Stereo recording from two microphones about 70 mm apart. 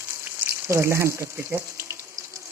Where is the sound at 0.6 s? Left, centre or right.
Right.